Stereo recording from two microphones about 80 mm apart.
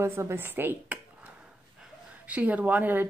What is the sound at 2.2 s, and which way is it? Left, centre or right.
Speech, centre.